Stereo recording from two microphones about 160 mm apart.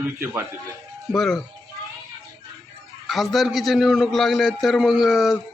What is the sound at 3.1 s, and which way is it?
A man's voice, centre (ahead or behind).